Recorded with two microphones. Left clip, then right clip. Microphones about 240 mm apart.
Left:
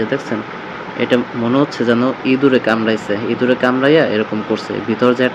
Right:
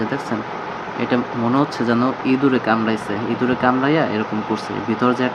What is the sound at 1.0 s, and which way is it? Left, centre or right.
Speech, centre.